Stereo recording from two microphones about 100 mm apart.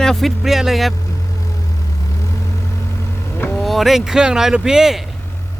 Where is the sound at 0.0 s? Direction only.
5° left (ahead or behind).